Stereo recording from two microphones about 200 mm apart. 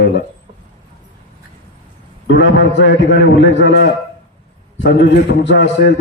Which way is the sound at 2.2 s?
65° left (ahead or behind).